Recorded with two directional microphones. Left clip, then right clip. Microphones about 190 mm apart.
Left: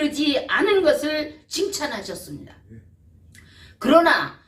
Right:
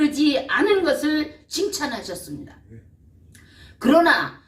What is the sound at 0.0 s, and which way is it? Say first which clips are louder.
A woman's voice: right 2 dB; 25° left (ahead or behind).